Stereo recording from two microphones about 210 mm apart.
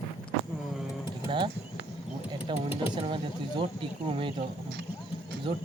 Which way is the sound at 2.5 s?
20° right (ahead or behind).